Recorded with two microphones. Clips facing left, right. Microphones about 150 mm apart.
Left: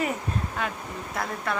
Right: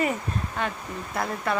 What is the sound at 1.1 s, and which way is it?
Speech, centre (ahead or behind).